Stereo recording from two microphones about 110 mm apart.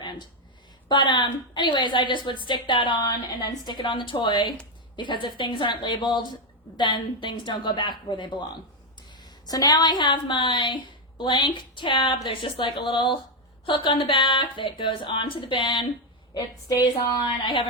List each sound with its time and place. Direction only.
0.9 s a woman's voice: 40° left (ahead or behind)
16.9 s a woman's voice: 40° left (ahead or behind)